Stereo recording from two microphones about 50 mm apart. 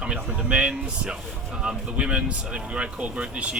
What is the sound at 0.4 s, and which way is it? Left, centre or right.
Speech, right.